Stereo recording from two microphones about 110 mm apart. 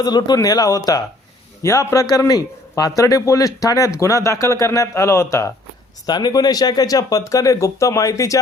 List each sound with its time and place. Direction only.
0.0 s a man's voice: 40° left (ahead or behind)
6.1 s speech: 40° left (ahead or behind)